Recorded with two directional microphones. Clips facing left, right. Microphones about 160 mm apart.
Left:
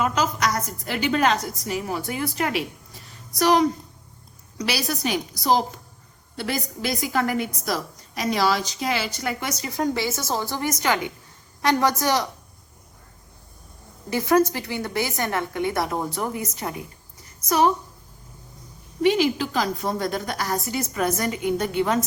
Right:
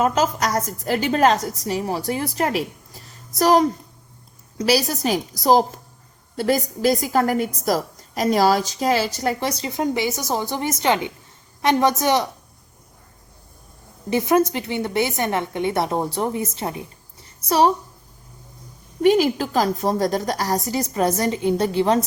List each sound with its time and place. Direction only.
0.0 s a woman's voice: 40° right (ahead or behind); by 12.3 s 20° right (ahead or behind)
14.1 s a woman's voice: 20° right (ahead or behind)
17.2 s a sound: 30° right (ahead or behind)
19.0 s a woman's voice: 45° right (ahead or behind)